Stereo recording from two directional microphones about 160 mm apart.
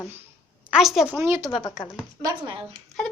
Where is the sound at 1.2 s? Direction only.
15° right (ahead or behind).